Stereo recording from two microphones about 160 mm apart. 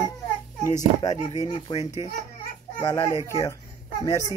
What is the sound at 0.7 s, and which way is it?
Speech, 45° left (ahead or behind).